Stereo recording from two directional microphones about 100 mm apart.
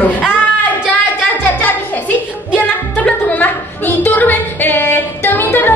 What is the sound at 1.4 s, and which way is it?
Music, 15° left (ahead or behind).